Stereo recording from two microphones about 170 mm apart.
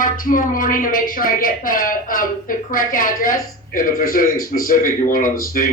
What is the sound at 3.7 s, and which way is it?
Speech, 55° left (ahead or behind).